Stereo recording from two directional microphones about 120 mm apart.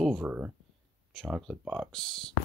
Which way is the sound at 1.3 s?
Centre (ahead or behind).